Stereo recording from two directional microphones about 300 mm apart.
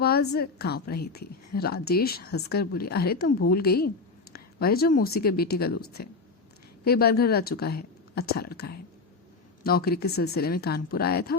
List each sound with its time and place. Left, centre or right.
0.0 s a woman's voice: left